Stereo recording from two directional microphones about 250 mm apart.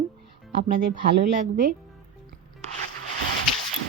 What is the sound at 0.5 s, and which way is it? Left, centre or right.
A woman's voice, right.